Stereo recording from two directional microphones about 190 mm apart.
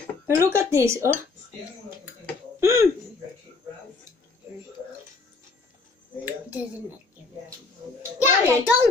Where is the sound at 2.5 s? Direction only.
15° right (ahead or behind).